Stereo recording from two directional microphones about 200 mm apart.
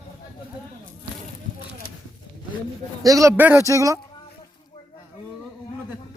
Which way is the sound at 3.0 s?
15° right (ahead or behind).